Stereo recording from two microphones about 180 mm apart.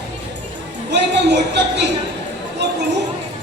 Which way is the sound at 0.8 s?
70° right (ahead or behind).